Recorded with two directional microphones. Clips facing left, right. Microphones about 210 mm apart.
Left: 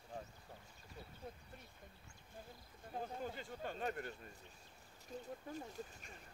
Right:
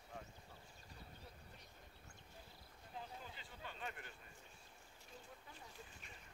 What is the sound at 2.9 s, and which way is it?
Speech, 50° left (ahead or behind).